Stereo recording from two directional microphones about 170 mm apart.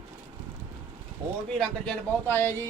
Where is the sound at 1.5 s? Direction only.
5° left (ahead or behind).